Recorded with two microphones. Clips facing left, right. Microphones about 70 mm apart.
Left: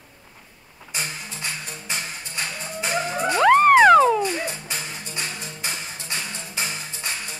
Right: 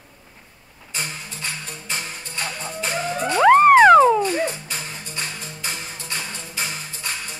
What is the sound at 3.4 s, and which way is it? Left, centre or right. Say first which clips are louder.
Music: right 3 dB; centre.